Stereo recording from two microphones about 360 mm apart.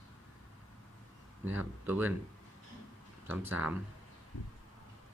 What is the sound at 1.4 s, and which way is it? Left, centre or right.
Speech, centre.